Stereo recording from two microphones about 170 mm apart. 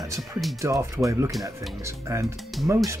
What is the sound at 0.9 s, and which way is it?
Speech, 20° right (ahead or behind).